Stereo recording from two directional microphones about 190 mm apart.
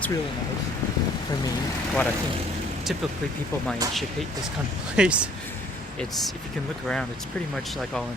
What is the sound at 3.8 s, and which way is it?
Speech, 20° right (ahead or behind).